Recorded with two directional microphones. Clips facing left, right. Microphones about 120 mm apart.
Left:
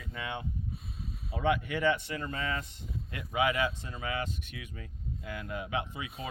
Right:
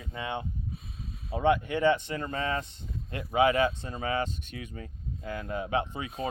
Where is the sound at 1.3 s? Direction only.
30° right (ahead or behind).